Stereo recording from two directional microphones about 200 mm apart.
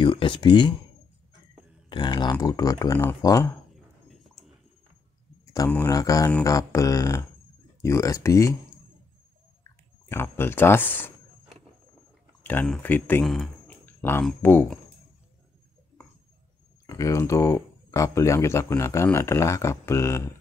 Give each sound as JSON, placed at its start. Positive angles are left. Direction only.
{"t": 0.0, "sound": "speech", "side_deg": 25}
{"t": 1.9, "sound": "speech", "side_deg": 20}
{"t": 4.1, "sound": "dog", "side_deg": 0}
{"t": 5.5, "sound": "speech", "side_deg": 15}
{"t": 9.6, "sound": "a sound", "side_deg": 15}
{"t": 12.4, "sound": "speech", "side_deg": 5}
{"t": 16.8, "sound": "speech", "side_deg": 15}